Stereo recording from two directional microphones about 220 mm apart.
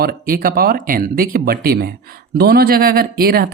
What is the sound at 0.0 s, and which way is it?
A woman's voice, 40° right (ahead or behind).